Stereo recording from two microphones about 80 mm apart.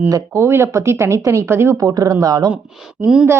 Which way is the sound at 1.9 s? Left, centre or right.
Right.